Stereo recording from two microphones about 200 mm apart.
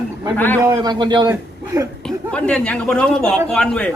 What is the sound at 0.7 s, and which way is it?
A man's voice, 20° right (ahead or behind).